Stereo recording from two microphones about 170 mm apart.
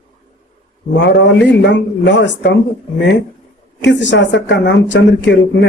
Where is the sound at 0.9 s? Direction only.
90° left.